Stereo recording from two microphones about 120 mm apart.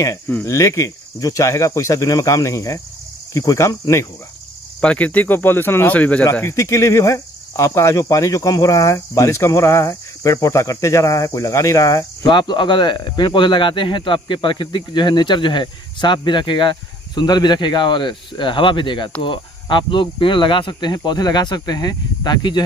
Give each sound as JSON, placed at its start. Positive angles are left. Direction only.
{"t": 0.0, "sound": "speech", "side_deg": 25}
{"t": 4.7, "sound": "speech", "side_deg": 10}
{"t": 12.3, "sound": "speech", "side_deg": 40}